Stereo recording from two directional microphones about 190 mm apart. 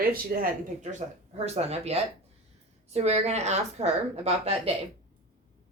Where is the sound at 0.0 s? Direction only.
50° right (ahead or behind).